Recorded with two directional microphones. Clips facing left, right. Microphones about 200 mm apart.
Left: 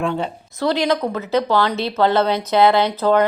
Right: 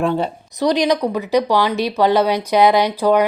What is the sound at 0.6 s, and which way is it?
A woman's voice, 15° right (ahead or behind).